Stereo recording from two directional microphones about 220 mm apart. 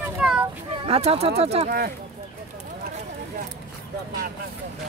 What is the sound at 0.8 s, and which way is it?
Speech, 30° right (ahead or behind).